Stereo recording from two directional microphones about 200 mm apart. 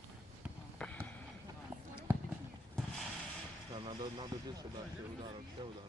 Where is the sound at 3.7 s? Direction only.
25° right (ahead or behind).